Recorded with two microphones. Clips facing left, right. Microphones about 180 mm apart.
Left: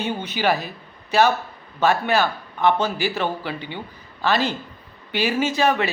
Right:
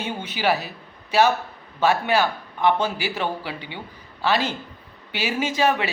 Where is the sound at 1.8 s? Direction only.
10° right (ahead or behind).